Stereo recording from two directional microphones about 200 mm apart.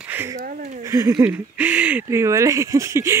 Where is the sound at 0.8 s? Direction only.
15° right (ahead or behind).